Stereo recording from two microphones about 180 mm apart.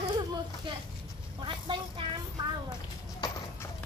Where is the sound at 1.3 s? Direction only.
25° right (ahead or behind).